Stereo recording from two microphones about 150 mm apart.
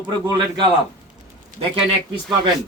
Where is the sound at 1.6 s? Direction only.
40° right (ahead or behind).